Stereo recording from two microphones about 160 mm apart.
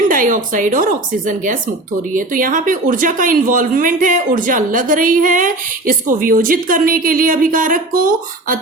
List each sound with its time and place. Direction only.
0.1 s speech: 55° right (ahead or behind)